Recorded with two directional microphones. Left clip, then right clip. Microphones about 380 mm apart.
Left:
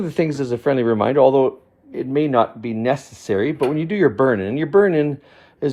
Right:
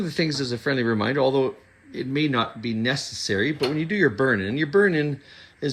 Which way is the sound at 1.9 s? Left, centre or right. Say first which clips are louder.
Left 7 dB; centre.